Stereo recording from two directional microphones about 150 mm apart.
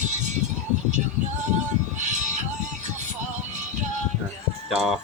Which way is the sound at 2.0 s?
55° right (ahead or behind).